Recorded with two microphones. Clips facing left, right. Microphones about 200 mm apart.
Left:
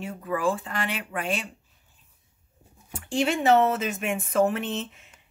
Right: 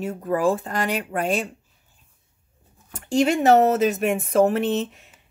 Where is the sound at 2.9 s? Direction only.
40° right (ahead or behind).